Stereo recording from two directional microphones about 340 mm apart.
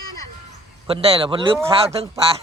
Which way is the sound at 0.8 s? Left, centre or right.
Centre.